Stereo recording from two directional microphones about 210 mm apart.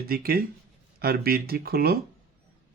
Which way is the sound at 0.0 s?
45° right (ahead or behind).